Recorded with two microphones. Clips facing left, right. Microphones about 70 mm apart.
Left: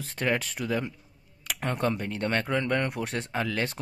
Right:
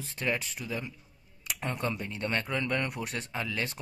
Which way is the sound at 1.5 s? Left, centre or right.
Left.